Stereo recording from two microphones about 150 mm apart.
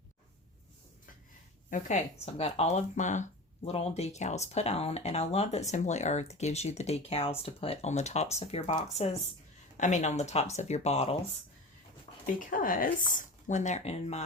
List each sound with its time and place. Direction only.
2.2 s speech: 45° left (ahead or behind)
9.7 s speech: 55° left (ahead or behind)
12.2 s speech: 65° left (ahead or behind); by 14.2 s 45° left (ahead or behind)